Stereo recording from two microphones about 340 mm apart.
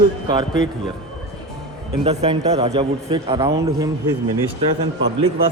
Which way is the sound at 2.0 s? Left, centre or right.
Centre.